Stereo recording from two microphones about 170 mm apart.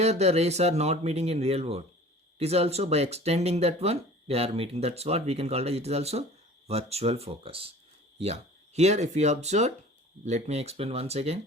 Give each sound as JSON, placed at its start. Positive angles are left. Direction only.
{"t": 0.0, "sound": "speech", "side_deg": -40}